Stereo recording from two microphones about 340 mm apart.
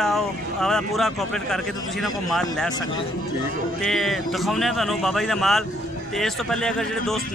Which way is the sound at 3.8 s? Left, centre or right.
Centre.